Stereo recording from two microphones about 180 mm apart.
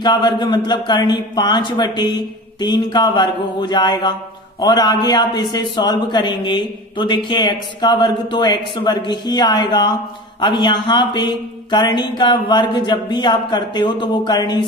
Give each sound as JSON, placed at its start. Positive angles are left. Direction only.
{"t": 0.0, "sound": "a man's voice", "side_deg": 25}